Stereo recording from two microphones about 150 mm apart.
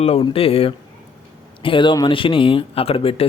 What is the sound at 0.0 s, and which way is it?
A man's voice, 40° left (ahead or behind).